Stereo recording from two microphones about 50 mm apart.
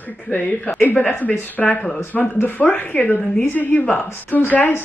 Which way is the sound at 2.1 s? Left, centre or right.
Left.